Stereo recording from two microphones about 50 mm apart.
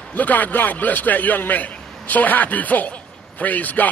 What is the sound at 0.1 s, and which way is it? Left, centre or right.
A man's voice, left.